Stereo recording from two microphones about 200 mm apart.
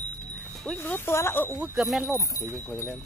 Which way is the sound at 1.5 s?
5° right (ahead or behind).